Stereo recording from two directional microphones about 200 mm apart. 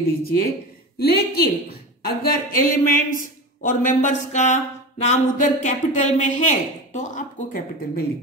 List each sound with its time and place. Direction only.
0.2 s a woman's voice: 50° left (ahead or behind)